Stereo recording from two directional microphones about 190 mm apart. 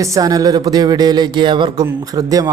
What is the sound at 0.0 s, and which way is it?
Speech, 15° right (ahead or behind).